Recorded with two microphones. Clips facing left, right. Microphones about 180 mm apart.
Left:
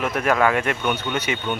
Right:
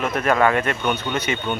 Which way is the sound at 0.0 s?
10° left (ahead or behind).